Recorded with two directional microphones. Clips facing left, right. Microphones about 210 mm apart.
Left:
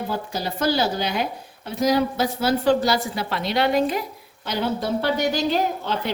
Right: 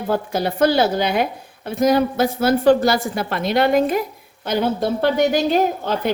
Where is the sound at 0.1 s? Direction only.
55° right (ahead or behind).